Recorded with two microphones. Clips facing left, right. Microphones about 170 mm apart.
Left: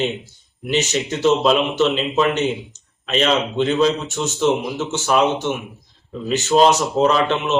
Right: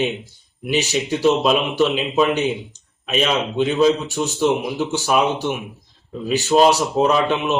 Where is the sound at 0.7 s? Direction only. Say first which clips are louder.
Even; 10° right (ahead or behind).